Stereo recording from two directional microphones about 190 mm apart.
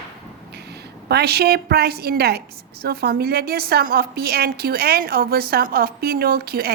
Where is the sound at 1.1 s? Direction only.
55° right (ahead or behind).